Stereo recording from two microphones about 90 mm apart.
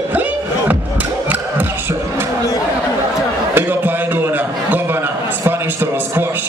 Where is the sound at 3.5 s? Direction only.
25° right (ahead or behind).